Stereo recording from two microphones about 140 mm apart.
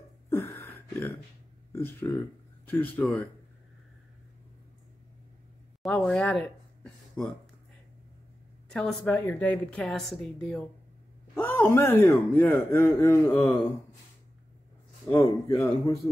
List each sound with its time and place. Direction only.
0.3 s a sound: 15° left (ahead or behind)
1.7 s a man's voice: 15° left (ahead or behind)
5.8 s a sound: 10° left (ahead or behind)
8.6 s a woman's voice: 5° left (ahead or behind)
11.3 s a man's voice: 15° left (ahead or behind)
15.1 s a man's voice: 20° left (ahead or behind)